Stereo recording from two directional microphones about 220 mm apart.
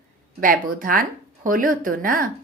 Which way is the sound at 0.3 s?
40° right (ahead or behind).